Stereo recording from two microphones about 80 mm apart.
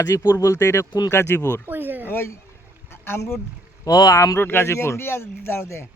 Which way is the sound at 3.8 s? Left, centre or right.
Left.